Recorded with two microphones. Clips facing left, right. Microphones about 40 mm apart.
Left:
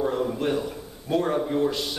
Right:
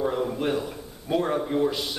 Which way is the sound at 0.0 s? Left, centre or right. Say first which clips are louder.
Left 1 dB; centre.